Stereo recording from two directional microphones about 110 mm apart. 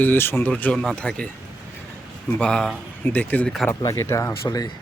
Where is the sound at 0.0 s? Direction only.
20° left (ahead or behind).